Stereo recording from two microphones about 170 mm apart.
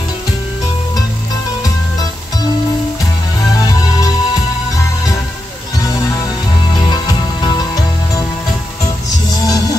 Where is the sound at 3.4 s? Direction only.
20° left (ahead or behind).